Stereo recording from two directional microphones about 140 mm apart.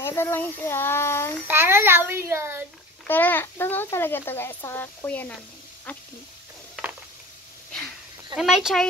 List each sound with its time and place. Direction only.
0.0 s a child's voice: 15° left (ahead or behind)
1.5 s a child's voice: 15° right (ahead or behind)
3.1 s a child's voice: 15° left (ahead or behind)
8.4 s speech: centre (ahead or behind)